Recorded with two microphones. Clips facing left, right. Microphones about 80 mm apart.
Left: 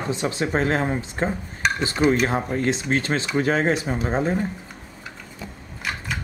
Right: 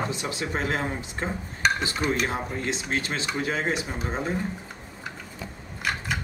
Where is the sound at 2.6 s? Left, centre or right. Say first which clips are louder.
Left 6 dB; left.